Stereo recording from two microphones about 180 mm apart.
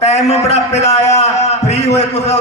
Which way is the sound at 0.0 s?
35° left (ahead or behind).